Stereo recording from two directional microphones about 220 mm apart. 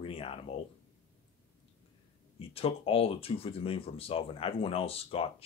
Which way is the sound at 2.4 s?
25° left (ahead or behind).